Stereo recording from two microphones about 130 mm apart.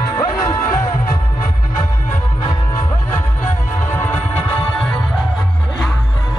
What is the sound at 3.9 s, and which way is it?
Music, 15° left (ahead or behind).